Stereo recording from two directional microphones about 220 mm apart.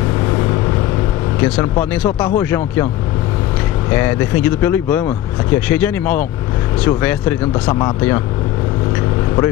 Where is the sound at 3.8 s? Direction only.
10° left (ahead or behind).